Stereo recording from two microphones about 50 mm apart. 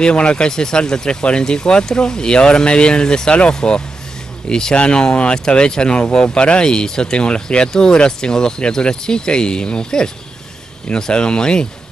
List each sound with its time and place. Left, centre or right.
0.0 s speech: centre